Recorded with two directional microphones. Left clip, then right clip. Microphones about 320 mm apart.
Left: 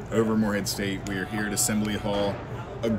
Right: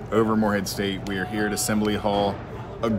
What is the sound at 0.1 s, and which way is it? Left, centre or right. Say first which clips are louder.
Speech: right 4 dB; centre.